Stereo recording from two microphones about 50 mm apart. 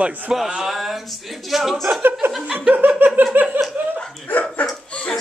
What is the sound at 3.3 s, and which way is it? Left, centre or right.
Laughter, right.